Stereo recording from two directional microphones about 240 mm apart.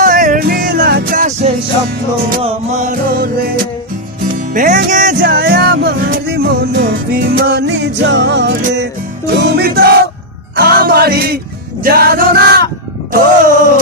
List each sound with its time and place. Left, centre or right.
0.0 s music: right
4.5 s music: right
11.8 s male singing: right
13.1 s a sound: right